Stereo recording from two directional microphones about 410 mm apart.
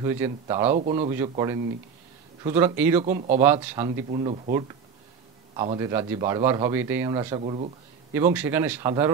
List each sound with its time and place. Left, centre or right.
0.0 s speech: centre
3.0 s speech: centre
3.3 s speech: centre